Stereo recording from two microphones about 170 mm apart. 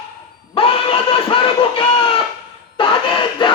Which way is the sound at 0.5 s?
35° left (ahead or behind).